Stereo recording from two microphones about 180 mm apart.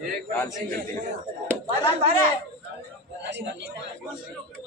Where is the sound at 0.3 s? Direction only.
10° left (ahead or behind).